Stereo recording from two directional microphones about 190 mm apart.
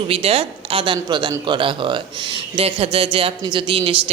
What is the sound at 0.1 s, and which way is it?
A woman's voice, 30° right (ahead or behind).